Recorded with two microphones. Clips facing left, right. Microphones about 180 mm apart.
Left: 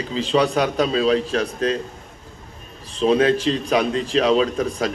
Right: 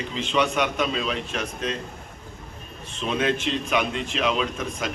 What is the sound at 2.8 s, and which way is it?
A man's voice, 35° left (ahead or behind).